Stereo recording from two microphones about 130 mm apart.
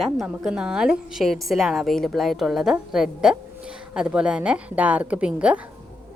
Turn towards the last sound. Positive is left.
turn(degrees=-10)  # may be behind; listen again after turning